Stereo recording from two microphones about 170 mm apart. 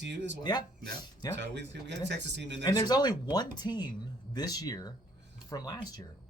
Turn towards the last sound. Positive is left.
turn(degrees=20)  # may be behind; listen again after turning